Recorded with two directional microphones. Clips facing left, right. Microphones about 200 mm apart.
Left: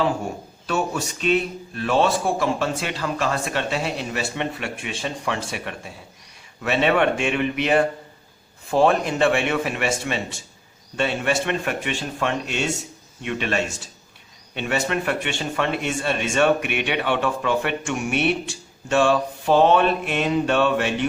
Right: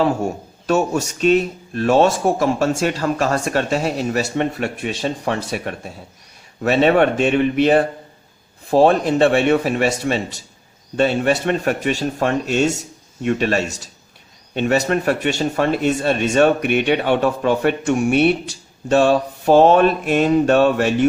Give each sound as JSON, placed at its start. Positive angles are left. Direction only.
{"t": 0.7, "sound": "a man's voice", "side_deg": -45}